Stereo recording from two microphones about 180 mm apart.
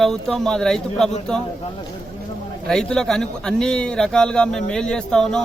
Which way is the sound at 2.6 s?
5° left (ahead or behind).